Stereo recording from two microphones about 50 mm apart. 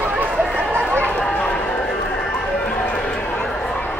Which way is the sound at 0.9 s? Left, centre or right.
Left.